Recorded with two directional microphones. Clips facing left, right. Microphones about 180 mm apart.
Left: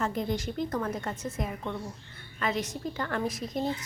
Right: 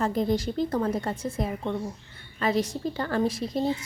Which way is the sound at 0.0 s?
35° right (ahead or behind).